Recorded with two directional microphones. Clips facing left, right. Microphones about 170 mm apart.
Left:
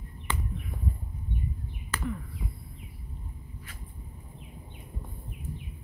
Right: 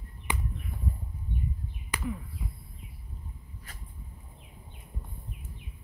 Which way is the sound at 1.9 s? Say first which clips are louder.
Left 1 dB; 15° right (ahead or behind).